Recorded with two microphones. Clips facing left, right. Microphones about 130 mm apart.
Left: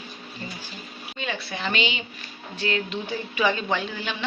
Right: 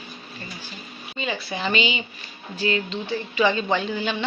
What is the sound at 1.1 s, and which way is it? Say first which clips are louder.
Speech: right 3 dB; centre (ahead or behind).